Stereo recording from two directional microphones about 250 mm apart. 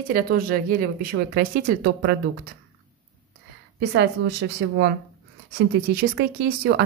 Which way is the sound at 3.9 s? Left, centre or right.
Right.